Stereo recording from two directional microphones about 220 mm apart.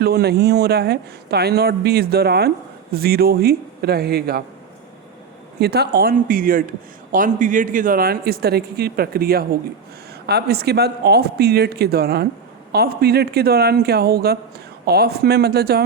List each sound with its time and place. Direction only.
0.0 s speech: 45° right (ahead or behind)
5.5 s speech: 50° right (ahead or behind)